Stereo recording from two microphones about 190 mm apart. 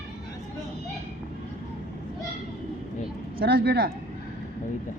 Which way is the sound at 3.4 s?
55° right (ahead or behind).